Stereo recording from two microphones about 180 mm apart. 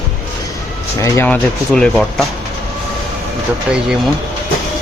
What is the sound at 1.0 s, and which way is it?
Speech, 10° left (ahead or behind).